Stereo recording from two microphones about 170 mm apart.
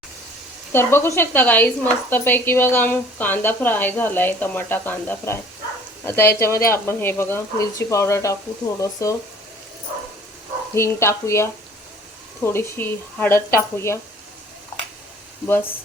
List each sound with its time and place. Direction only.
0.7 s speech: 15° left (ahead or behind)
10.8 s speech: 15° left (ahead or behind)